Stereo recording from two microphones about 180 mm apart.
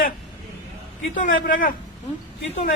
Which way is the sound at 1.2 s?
50° left (ahead or behind).